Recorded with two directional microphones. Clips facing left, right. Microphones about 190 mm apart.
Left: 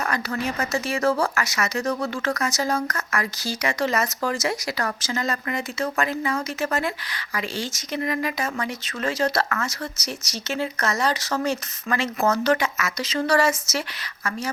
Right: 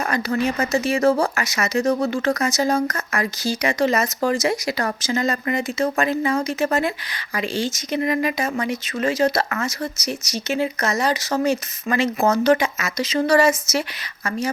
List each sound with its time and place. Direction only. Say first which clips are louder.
0.1 s speech: right 5 dB; 20° right (ahead or behind)